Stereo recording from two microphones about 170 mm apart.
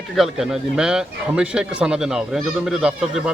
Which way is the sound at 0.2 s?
Centre (ahead or behind).